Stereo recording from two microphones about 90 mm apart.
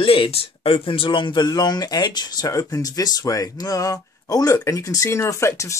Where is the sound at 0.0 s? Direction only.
80° left.